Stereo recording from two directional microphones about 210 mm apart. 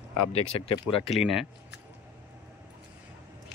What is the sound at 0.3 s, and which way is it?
Speech, 25° left (ahead or behind).